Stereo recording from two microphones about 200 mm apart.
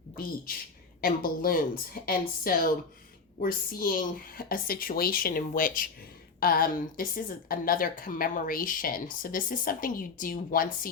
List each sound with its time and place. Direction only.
1.0 s speech: 45° left (ahead or behind)